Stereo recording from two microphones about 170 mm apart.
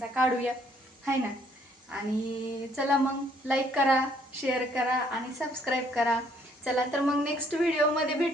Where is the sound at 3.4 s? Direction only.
5° right (ahead or behind).